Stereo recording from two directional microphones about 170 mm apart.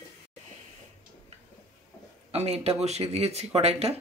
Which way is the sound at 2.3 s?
35° right (ahead or behind).